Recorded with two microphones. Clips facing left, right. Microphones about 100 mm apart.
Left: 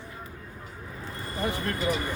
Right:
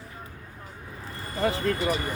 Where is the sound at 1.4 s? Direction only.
90° right.